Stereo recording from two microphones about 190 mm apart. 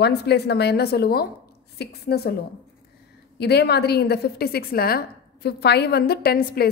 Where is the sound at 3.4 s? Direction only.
60° left (ahead or behind).